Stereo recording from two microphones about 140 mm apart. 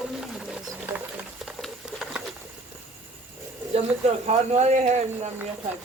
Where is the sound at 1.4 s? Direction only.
5° right (ahead or behind).